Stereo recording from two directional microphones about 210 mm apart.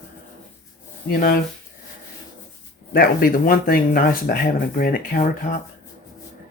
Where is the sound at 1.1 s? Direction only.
40° left (ahead or behind).